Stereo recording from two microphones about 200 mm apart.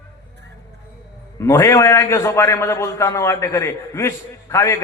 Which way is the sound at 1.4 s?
15° left (ahead or behind).